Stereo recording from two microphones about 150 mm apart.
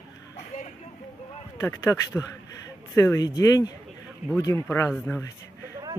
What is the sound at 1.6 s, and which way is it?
Speech, 20° left (ahead or behind).